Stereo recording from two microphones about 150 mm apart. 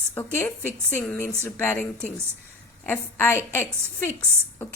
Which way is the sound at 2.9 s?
15° left (ahead or behind).